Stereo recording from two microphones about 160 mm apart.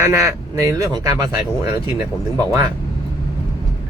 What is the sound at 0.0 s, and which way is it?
Speech, 20° right (ahead or behind).